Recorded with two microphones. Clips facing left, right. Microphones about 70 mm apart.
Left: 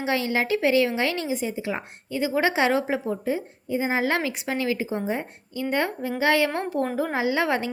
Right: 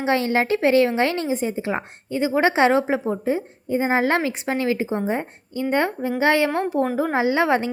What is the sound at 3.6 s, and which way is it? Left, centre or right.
A woman's voice, right.